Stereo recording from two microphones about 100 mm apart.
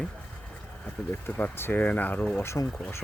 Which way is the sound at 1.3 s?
20° left (ahead or behind).